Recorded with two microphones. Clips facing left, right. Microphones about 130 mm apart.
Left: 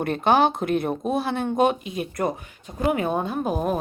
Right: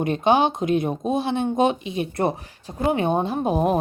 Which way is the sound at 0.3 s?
20° right (ahead or behind).